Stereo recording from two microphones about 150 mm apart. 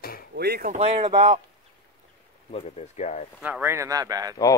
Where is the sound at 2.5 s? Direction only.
45° left (ahead or behind).